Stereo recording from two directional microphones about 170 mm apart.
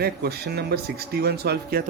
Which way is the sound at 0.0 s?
65° right (ahead or behind).